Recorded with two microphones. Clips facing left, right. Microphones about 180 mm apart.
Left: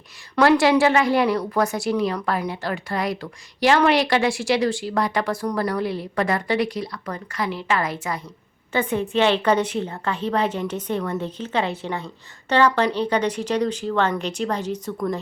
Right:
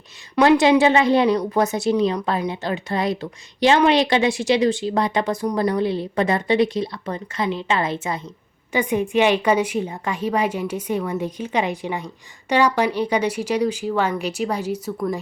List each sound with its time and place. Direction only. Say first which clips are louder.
0.3 s a woman's voice: right 2 dB; 20° right (ahead or behind)